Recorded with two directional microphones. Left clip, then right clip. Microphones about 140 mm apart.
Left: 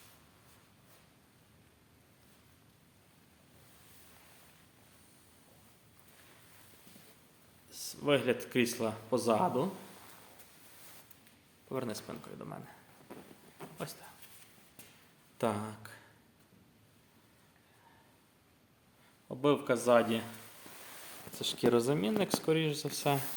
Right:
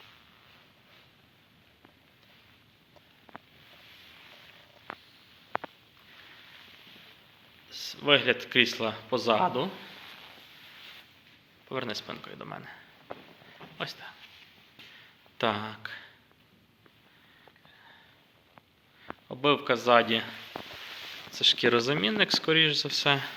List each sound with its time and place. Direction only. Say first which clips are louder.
7.7 s a sound: right 7 dB; 20° left (ahead or behind)
8.0 s speech: right 7 dB; 15° left (ahead or behind)
11.7 s speech: right 5 dB; 15° left (ahead or behind)
13.7 s speech: right 8 dB; 15° left (ahead or behind)
15.4 s speech: right 6 dB; 15° left (ahead or behind)
19.3 s speech: right 4 dB; 10° left (ahead or behind)
21.3 s speech: right 7 dB; 20° left (ahead or behind)